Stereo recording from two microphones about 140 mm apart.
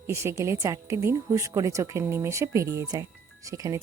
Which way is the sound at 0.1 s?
20° right (ahead or behind).